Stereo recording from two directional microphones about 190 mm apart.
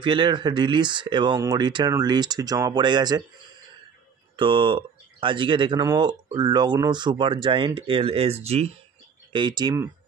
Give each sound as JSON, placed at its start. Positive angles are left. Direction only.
{"t": 0.0, "sound": "speech", "side_deg": -25}
{"t": 4.4, "sound": "speech", "side_deg": -25}
{"t": 9.3, "sound": "speech", "side_deg": -25}